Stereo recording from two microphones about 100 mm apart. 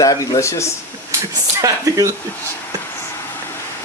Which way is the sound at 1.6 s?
35° right (ahead or behind).